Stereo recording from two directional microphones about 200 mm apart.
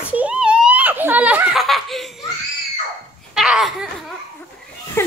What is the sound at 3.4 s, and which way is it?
Babbling, centre (ahead or behind).